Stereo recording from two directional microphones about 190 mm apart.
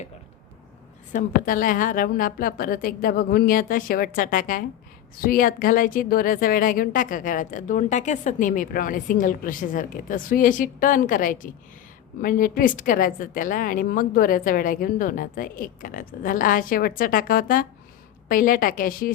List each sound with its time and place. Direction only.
1.1 s speech: 45° left (ahead or behind)